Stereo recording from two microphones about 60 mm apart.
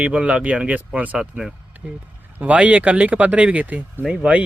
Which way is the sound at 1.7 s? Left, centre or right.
Right.